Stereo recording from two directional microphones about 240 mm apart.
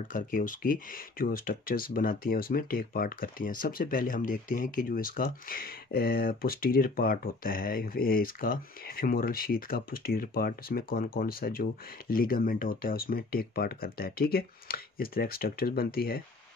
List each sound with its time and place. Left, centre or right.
0.1 s speech: left